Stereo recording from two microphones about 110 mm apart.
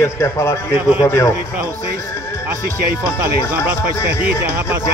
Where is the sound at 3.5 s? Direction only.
15° right (ahead or behind).